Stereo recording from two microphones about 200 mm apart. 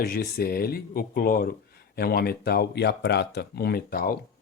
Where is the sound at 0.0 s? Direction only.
45° left (ahead or behind).